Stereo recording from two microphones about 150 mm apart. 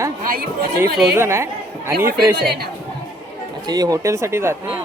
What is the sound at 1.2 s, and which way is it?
Speech, 15° right (ahead or behind).